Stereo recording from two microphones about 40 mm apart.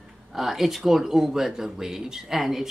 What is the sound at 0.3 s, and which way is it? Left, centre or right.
Speech, centre.